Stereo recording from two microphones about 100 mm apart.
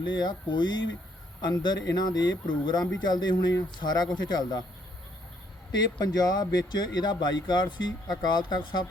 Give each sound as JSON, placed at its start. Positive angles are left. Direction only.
{"t": 0.0, "sound": "speech", "side_deg": 50}
{"t": 6.0, "sound": "speech", "side_deg": 40}